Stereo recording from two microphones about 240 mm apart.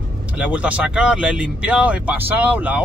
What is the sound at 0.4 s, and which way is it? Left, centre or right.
Speech, centre.